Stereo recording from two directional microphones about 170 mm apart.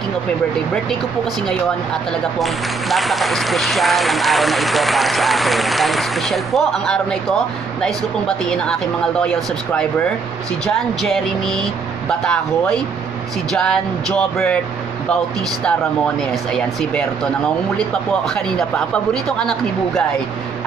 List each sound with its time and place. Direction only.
2.3 s speech: centre (ahead or behind)
16.2 s speech: 5° left (ahead or behind)